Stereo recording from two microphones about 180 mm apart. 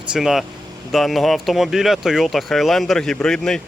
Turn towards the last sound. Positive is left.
turn(degrees=5)  # may be behind; listen again after turning